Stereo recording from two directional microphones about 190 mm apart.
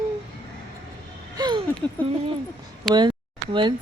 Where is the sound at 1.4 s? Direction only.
20° right (ahead or behind).